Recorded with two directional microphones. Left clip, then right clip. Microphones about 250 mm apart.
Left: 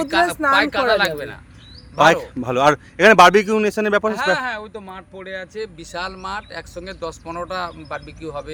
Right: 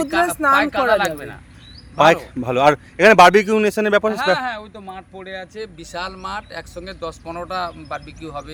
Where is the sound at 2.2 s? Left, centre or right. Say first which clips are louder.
Right 1 dB; centre.